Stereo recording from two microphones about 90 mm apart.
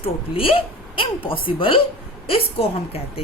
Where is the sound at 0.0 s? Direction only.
90° left; by 1.8 s 75° left (ahead or behind).